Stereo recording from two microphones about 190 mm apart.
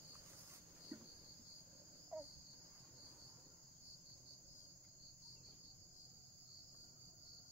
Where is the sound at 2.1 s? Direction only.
5° right (ahead or behind).